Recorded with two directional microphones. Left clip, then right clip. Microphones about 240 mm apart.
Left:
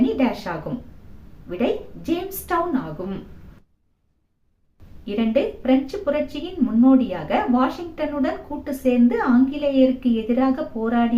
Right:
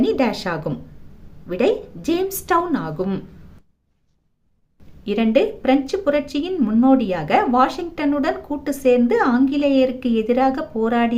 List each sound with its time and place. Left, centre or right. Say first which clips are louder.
0.0 s speech: right 3 dB; right
5.0 s speech: right 4 dB; right